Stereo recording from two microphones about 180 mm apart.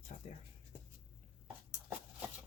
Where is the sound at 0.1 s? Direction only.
45° left (ahead or behind).